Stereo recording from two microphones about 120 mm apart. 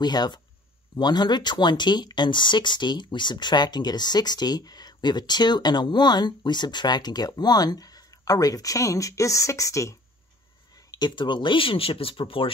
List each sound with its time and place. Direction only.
0.0 s speech: 35° left (ahead or behind)